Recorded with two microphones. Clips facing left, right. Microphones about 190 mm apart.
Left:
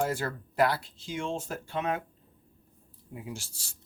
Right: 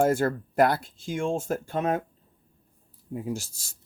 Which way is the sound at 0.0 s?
50° right (ahead or behind).